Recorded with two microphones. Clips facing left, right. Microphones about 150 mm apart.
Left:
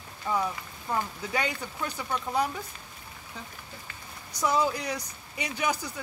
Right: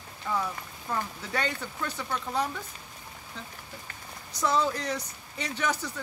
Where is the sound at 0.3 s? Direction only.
20° left (ahead or behind).